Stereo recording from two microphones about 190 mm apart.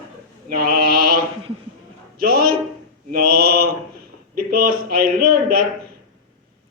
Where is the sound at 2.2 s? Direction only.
50° right (ahead or behind).